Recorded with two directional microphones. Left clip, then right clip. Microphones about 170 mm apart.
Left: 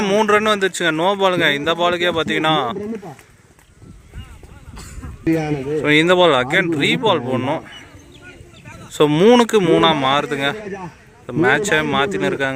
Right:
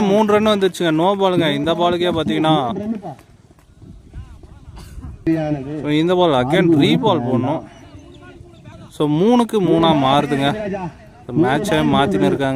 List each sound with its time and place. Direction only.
0.0 s a man's voice: 10° right (ahead or behind)
4.8 s a sound: 40° right (ahead or behind)
5.8 s a man's voice: 10° right (ahead or behind)
8.9 s a man's voice: 5° right (ahead or behind)